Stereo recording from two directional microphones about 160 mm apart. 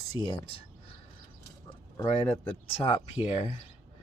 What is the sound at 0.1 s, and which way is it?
Speech, 30° left (ahead or behind).